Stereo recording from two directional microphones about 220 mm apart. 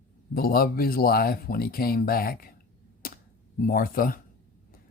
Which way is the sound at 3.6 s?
40° left (ahead or behind).